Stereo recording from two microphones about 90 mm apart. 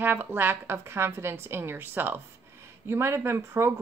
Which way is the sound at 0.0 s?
20° right (ahead or behind).